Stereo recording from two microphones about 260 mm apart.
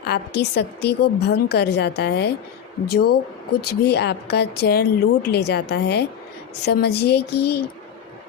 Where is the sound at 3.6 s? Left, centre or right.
Left.